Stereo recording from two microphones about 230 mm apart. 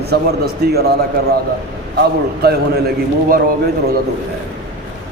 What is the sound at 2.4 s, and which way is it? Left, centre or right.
Speech, right.